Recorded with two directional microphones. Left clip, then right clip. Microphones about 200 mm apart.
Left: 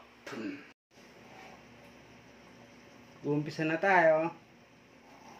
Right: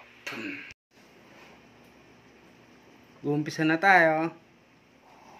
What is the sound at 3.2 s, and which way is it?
Speech, 40° right (ahead or behind).